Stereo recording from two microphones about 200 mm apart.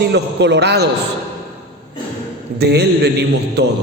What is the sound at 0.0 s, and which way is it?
Speech, 55° right (ahead or behind).